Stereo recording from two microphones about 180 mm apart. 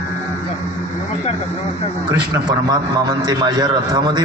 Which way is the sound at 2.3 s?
20° right (ahead or behind).